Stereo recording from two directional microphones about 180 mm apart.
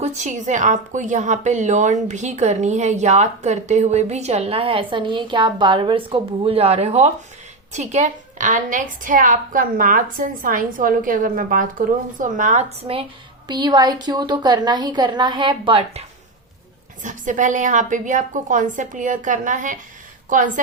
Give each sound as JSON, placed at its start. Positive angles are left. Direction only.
{"t": 0.0, "sound": "a woman's voice", "side_deg": -40}
{"t": 13.5, "sound": "a woman's voice", "side_deg": -25}
{"t": 17.0, "sound": "a woman's voice", "side_deg": -45}